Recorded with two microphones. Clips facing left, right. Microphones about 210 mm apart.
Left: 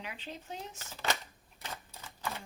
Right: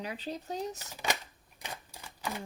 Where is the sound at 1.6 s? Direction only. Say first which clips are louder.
Right 1 dB; 15° right (ahead or behind).